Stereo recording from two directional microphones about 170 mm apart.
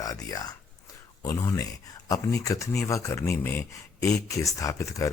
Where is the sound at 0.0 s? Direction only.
20° left (ahead or behind).